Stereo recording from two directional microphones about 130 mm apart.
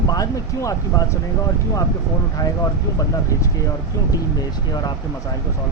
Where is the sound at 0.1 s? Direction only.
25° left (ahead or behind).